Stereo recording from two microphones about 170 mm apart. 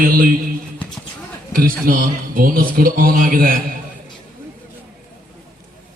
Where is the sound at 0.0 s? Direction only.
55° right (ahead or behind).